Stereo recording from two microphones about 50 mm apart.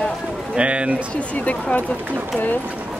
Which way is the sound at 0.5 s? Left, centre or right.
Right.